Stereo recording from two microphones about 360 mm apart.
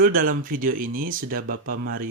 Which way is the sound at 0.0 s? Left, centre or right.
Right.